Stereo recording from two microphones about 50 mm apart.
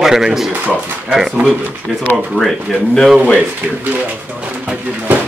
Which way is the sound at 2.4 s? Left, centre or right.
Right.